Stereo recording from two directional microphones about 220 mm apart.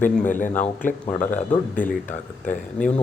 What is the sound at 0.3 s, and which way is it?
A man's voice, 35° left (ahead or behind).